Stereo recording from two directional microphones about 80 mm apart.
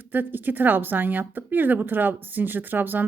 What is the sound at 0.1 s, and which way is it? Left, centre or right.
Speech, right.